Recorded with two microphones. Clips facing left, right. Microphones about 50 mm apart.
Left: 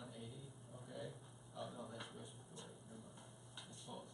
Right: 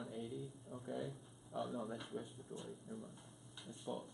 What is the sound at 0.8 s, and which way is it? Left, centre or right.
A man's voice, centre.